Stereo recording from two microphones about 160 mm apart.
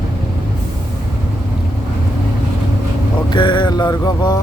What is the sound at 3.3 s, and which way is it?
Mantra, 30° left (ahead or behind).